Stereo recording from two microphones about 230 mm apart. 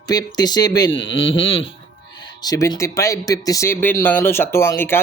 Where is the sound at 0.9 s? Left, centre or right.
Left.